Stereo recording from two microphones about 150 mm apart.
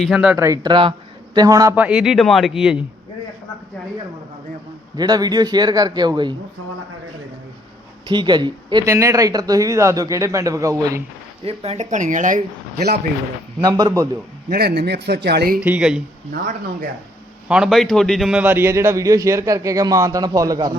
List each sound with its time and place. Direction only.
0.0 s speech: 5° right (ahead or behind)
0.3 s speech: 20° right (ahead or behind)
1.7 s speech: 5° right (ahead or behind)
4.9 s a man's voice: 25° right (ahead or behind)
8.0 s speech: 30° right (ahead or behind)
8.9 s a man's voice: 20° right (ahead or behind)
11.4 s speech: 40° right (ahead or behind); by 12.4 s 60° right (ahead or behind)
13.6 s a man's voice: 25° right (ahead or behind)
14.5 s a man's voice: 90° right
15.6 s speech: 10° right (ahead or behind)
17.5 s a man's voice: centre (ahead or behind); by 20.7 s 25° right (ahead or behind)